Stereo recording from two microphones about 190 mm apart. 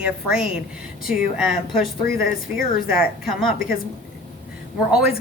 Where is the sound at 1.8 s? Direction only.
50° left (ahead or behind).